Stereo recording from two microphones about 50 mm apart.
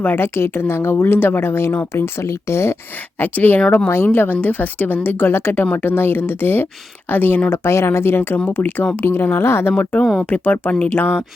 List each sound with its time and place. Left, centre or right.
0.2 s speech: left
3.2 s a woman's voice: left
3.8 s a woman's voice: left
7.5 s a woman's voice: left
9.0 s speech: left
10.2 s speech: left